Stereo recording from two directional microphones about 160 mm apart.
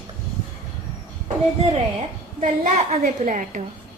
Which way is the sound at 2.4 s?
50° right (ahead or behind).